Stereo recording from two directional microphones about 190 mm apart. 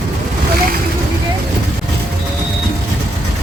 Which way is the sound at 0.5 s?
50° right (ahead or behind).